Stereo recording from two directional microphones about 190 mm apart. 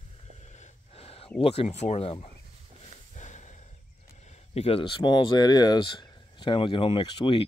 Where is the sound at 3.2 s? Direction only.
40° left (ahead or behind).